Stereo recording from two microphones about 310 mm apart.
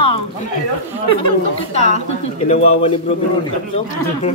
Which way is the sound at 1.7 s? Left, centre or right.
Left.